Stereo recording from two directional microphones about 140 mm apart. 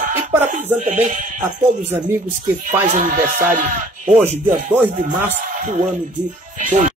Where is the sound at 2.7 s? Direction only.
65° right (ahead or behind).